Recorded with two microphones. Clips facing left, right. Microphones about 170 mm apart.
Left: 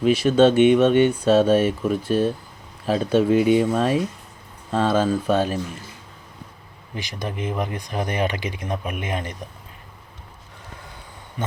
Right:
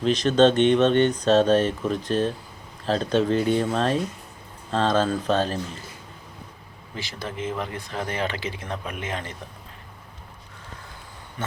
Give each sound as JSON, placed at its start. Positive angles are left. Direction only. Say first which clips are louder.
{"t": 0.0, "sound": "speech", "louder": "left 2 dB", "side_deg": 10}
{"t": 6.9, "sound": "speech", "louder": "left 3 dB", "side_deg": 15}